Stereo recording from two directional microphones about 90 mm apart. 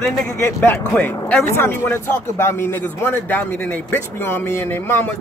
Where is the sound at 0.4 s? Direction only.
30° left (ahead or behind).